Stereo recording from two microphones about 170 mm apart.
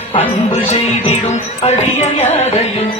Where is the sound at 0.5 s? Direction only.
40° left (ahead or behind).